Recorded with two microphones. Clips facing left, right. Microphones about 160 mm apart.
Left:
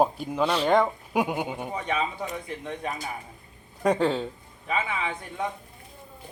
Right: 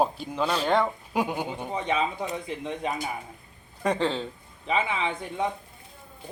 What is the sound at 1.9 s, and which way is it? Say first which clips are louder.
Speech: right 2 dB; 10° right (ahead or behind).